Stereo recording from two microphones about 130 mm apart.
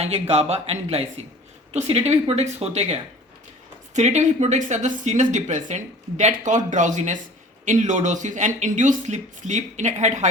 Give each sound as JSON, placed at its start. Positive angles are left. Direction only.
{"t": 0.0, "sound": "speech", "side_deg": -50}